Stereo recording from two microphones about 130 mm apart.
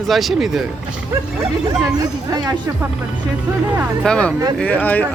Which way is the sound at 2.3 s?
30° right (ahead or behind).